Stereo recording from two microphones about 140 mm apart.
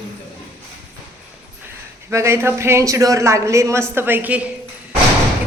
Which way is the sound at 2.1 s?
20° right (ahead or behind).